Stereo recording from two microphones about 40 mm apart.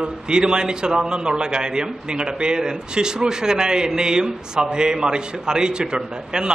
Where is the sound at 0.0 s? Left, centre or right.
Right.